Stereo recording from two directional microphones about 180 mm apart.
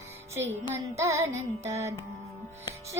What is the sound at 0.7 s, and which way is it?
Music, 15° right (ahead or behind).